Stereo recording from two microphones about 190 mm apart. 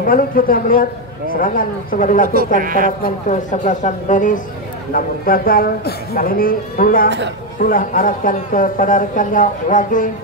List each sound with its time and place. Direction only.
0.0 s speech: 50° left (ahead or behind)
2.6 s a man's voice: 45° right (ahead or behind)
3.0 s speech: 40° left (ahead or behind)